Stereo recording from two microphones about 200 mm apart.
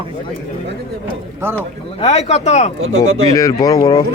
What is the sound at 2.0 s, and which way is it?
Speech, 30° left (ahead or behind).